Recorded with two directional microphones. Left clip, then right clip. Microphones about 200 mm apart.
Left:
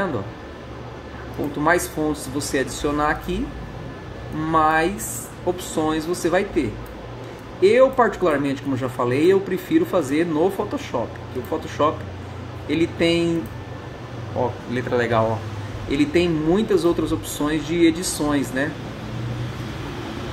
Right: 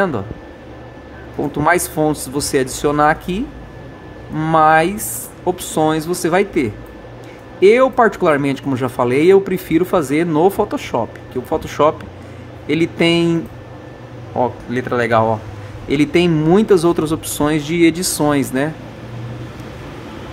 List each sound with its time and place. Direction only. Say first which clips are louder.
1.6 s speech: right 5 dB; 50° right (ahead or behind)
4.4 s speech: right 6 dB; 50° right (ahead or behind)
14.7 s speech: right 3 dB; 40° right (ahead or behind)